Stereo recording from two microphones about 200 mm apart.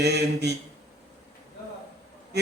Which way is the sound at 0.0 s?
55° right (ahead or behind).